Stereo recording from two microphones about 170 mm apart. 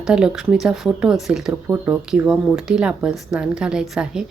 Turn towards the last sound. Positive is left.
turn(degrees=-5)  # may be behind; listen again after turning